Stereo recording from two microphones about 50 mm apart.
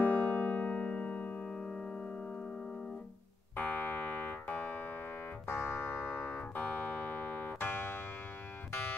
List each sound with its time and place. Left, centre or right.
0.0 s music: left
3.5 s music: left
5.5 s music: left
7.2 s music: left